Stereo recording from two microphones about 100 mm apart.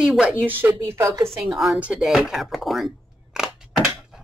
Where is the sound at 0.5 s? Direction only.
20° right (ahead or behind).